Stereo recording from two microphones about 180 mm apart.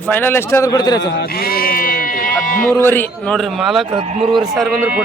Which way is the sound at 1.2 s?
60° left (ahead or behind).